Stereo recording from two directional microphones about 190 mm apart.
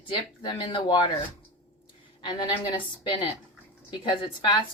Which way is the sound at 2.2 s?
25° left (ahead or behind).